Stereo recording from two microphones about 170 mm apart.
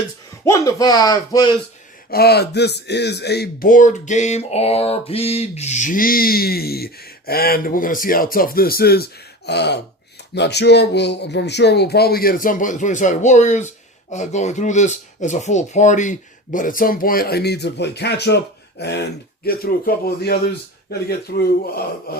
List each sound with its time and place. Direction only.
0.4 s speech: 20° left (ahead or behind)
2.0 s speech: 65° left (ahead or behind)
9.5 s speech: 80° left; by 21.8 s 65° left (ahead or behind)